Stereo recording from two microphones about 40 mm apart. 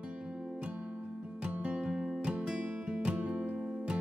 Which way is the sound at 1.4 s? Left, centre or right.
Right.